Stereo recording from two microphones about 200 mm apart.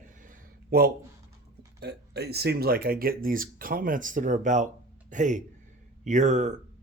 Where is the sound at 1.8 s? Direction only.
55° right (ahead or behind).